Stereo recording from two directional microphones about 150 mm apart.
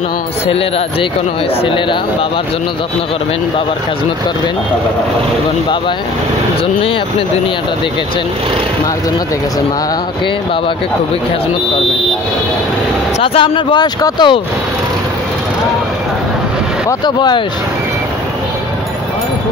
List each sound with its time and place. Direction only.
13.2 s speech: 35° left (ahead or behind)
17.0 s speech: 30° left (ahead or behind)